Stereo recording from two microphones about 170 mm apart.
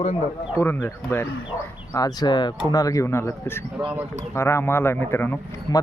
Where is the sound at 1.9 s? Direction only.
20° left (ahead or behind).